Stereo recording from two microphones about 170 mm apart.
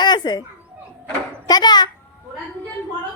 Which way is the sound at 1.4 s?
25° left (ahead or behind).